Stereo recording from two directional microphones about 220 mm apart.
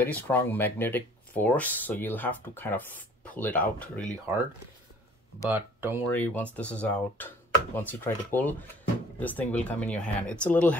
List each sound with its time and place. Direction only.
0.0 s speech: 10° left (ahead or behind)
5.5 s speech: 10° right (ahead or behind)
6.1 s speech: 5° left (ahead or behind)